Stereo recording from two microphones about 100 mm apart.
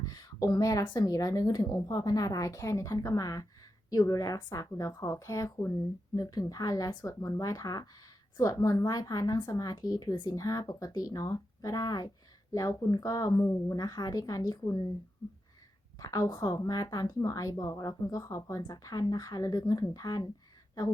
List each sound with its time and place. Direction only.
0.0 s a sound: 40° left (ahead or behind)
0.6 s a woman's voice: 35° left (ahead or behind)
16.0 s a woman's voice: 35° left (ahead or behind)